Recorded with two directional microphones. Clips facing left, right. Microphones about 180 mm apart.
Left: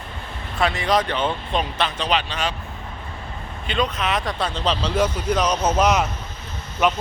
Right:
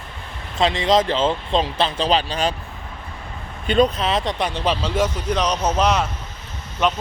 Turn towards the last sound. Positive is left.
turn(degrees=10)  # may be behind; listen again after turning